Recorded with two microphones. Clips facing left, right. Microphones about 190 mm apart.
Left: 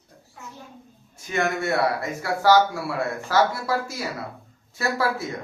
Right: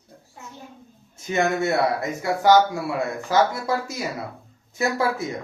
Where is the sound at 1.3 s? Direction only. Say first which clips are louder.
Right 2 dB; 20° right (ahead or behind).